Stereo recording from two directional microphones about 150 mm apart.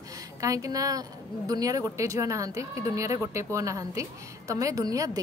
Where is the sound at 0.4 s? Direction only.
20° right (ahead or behind).